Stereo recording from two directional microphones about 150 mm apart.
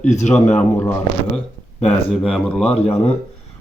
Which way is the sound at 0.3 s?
10° left (ahead or behind).